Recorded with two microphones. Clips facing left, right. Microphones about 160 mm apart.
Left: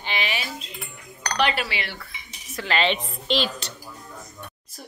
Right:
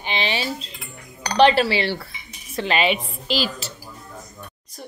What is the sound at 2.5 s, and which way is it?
Speech, 20° right (ahead or behind).